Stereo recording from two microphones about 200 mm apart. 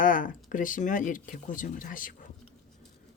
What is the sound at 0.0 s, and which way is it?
Speech, 40° left (ahead or behind).